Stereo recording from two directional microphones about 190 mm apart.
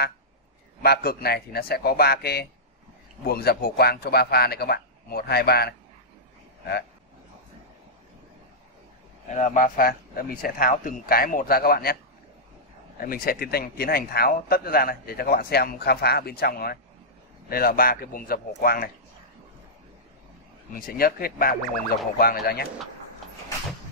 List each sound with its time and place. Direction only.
0.8 s a man's voice: 55° left (ahead or behind)
9.3 s a man's voice: 40° left (ahead or behind)
13.0 s a man's voice: 50° left (ahead or behind)
20.7 s a man's voice: 50° left (ahead or behind)